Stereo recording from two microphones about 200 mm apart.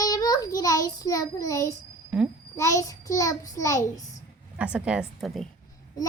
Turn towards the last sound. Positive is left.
turn(degrees=0)  # may be behind; listen again after turning